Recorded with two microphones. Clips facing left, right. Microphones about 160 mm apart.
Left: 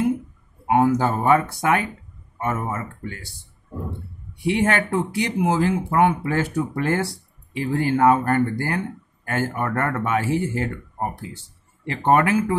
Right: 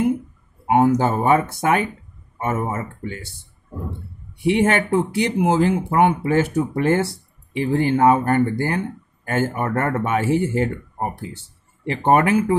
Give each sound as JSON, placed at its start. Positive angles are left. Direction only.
{"t": 0.7, "sound": "speech", "side_deg": -20}
{"t": 4.4, "sound": "speech", "side_deg": -25}
{"t": 11.8, "sound": "speech", "side_deg": -25}